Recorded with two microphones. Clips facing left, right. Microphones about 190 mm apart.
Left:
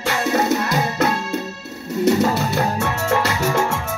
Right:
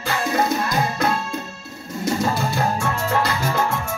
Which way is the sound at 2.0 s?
70° left (ahead or behind).